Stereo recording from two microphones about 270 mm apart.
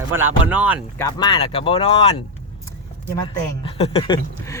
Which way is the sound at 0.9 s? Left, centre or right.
Centre.